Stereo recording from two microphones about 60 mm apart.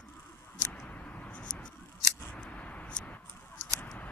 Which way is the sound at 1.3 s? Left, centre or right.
Centre.